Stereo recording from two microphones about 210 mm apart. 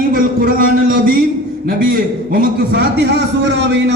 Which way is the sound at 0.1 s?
45° right (ahead or behind).